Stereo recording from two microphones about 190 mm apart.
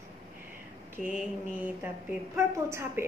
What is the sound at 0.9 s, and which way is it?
A woman's voice, 5° right (ahead or behind).